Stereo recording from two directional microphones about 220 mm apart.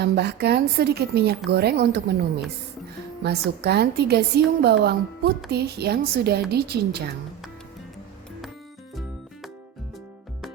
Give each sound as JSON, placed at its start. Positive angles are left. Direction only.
{"t": 0.0, "sound": "a woman's voice", "side_deg": -50}
{"t": 3.2, "sound": "a woman's voice", "side_deg": -50}